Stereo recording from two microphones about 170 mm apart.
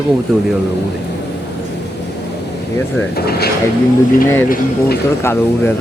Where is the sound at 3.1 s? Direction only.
65° left (ahead or behind).